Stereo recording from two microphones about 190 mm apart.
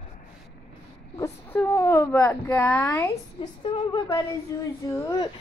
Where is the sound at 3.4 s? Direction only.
25° left (ahead or behind).